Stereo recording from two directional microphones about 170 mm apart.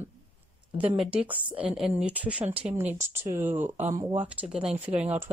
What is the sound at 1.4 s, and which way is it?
Speech, 30° right (ahead or behind).